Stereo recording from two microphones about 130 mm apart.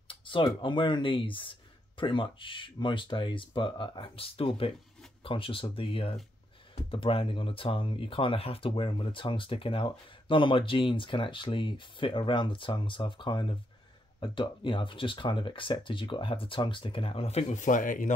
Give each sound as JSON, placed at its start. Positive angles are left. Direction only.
{"t": 0.1, "sound": "speech", "side_deg": 40}